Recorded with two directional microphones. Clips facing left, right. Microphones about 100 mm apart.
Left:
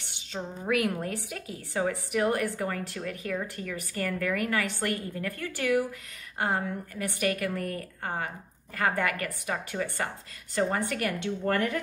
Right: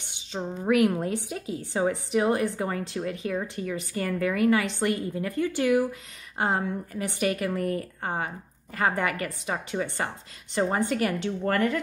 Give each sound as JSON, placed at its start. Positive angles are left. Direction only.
{"t": 0.1, "sound": "a woman's voice", "side_deg": -20}